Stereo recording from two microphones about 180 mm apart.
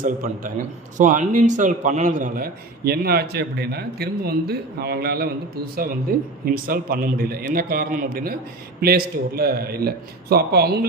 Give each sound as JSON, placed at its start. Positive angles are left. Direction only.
{"t": 0.0, "sound": "a man's voice", "side_deg": -45}